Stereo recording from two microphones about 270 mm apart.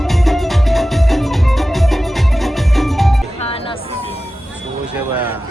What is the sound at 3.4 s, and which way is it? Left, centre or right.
Music, left.